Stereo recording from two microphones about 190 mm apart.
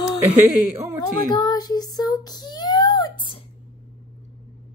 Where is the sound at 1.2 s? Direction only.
20° left (ahead or behind).